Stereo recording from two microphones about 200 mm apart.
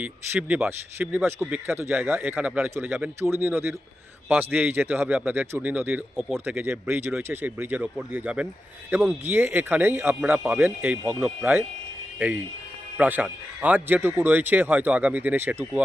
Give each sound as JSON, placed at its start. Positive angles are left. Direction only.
{"t": 0.0, "sound": "speech", "side_deg": -10}
{"t": 13.0, "sound": "speech", "side_deg": -10}